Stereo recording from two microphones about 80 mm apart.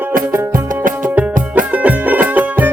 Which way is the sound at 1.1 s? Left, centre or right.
Right.